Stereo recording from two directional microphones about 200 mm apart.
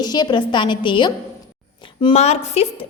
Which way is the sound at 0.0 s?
20° left (ahead or behind).